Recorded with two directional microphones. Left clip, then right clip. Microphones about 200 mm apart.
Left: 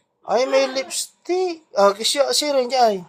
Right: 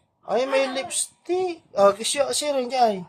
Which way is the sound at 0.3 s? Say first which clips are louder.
Left 4 dB; 5° left (ahead or behind).